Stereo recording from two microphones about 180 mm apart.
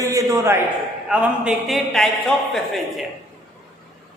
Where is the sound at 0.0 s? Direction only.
20° right (ahead or behind).